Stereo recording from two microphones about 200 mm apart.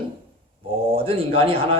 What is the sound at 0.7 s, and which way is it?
A man's voice, 30° right (ahead or behind).